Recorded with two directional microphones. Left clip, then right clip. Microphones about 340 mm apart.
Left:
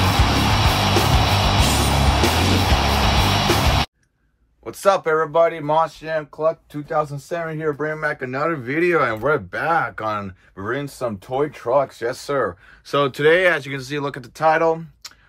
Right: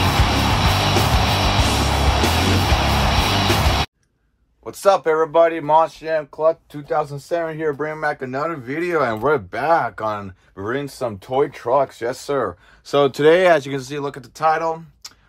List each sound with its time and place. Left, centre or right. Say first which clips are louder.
0.0 s music: even; centre
4.6 s speech: right 2 dB; centre